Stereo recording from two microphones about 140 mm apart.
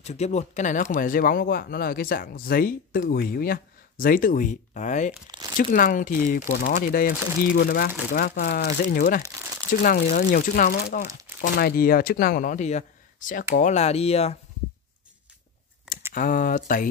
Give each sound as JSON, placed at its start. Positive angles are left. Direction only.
{"t": 0.0, "sound": "speech", "side_deg": 50}
{"t": 0.9, "sound": "speech", "side_deg": 85}
{"t": 5.6, "sound": "speech", "side_deg": 75}
{"t": 9.2, "sound": "crumpling", "side_deg": -25}
{"t": 9.8, "sound": "speech", "side_deg": 85}
{"t": 16.1, "sound": "speech", "side_deg": 70}